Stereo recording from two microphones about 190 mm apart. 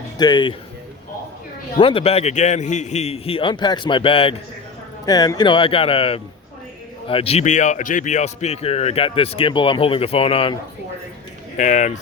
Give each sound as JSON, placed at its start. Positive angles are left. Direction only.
{"t": 0.2, "sound": "a man's voice", "side_deg": 25}
{"t": 1.8, "sound": "a man's voice", "side_deg": 30}
{"t": 11.5, "sound": "speech", "side_deg": 40}